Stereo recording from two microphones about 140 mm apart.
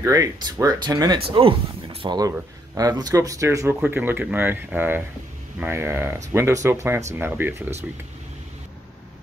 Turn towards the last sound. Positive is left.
turn(degrees=-15)  # may be behind; listen again after turning